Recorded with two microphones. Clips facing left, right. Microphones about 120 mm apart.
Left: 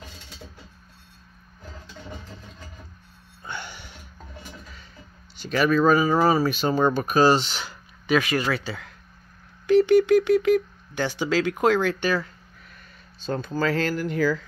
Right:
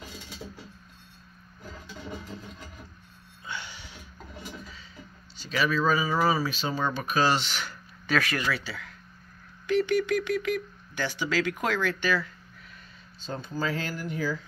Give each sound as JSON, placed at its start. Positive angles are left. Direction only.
{"t": 3.4, "sound": "music", "side_deg": 55}
{"t": 5.4, "sound": "speech", "side_deg": 50}
{"t": 8.1, "sound": "a sound", "side_deg": 20}
{"t": 8.4, "sound": "speech", "side_deg": 40}
{"t": 9.8, "sound": "a sound", "side_deg": 25}
{"t": 12.0, "sound": "speech", "side_deg": 45}
{"t": 13.2, "sound": "speech", "side_deg": 80}